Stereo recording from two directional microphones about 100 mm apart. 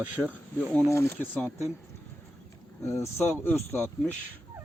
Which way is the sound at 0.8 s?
25° left (ahead or behind).